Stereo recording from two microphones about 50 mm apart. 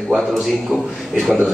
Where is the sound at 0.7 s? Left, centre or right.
Right.